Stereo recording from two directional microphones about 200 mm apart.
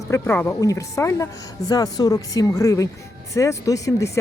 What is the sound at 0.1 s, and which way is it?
A woman's voice, 10° left (ahead or behind).